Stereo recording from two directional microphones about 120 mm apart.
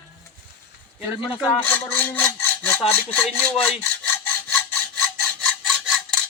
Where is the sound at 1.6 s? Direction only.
10° left (ahead or behind).